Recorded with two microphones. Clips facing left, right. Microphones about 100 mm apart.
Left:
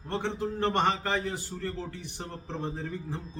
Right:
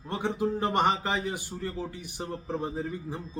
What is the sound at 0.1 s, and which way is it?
A man's voice, 15° right (ahead or behind).